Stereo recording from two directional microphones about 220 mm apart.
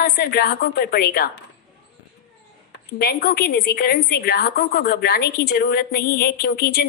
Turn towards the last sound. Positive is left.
turn(degrees=45)  # may be behind; listen again after turning